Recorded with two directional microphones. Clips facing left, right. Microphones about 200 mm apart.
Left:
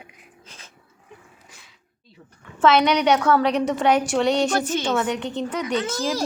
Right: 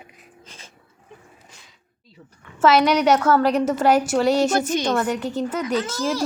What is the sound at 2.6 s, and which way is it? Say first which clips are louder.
A woman's voice: right 1 dB; 5° right (ahead or behind).